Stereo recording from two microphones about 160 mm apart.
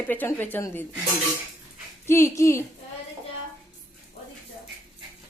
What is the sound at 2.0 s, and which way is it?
Speech, 15° left (ahead or behind).